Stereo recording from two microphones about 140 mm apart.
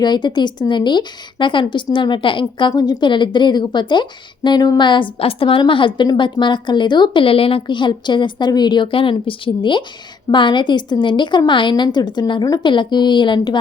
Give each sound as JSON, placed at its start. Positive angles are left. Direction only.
{"t": 0.0, "sound": "a woman's voice", "side_deg": 30}